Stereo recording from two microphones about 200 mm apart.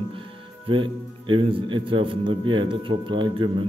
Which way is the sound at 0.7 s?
25° right (ahead or behind).